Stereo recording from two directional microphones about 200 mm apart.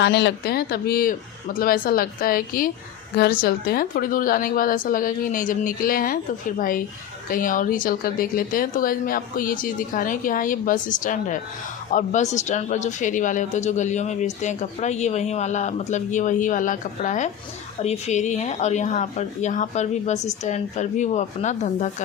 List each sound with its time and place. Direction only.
0.0 s speech: 60° left (ahead or behind); by 21.8 s 35° left (ahead or behind)